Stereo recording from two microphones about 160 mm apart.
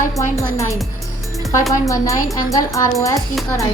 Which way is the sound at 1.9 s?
20° left (ahead or behind).